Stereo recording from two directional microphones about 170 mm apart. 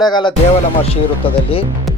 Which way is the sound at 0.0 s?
25° left (ahead or behind).